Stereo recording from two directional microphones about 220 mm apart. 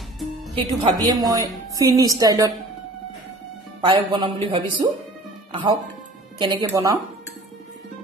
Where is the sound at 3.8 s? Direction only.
20° right (ahead or behind).